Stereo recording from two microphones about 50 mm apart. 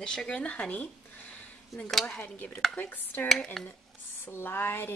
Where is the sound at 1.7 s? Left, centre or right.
Centre.